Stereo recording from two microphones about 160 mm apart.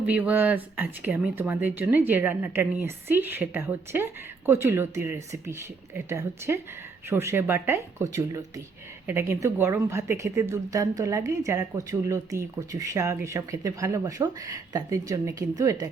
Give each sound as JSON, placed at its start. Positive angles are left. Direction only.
{"t": 0.1, "sound": "speech", "side_deg": -10}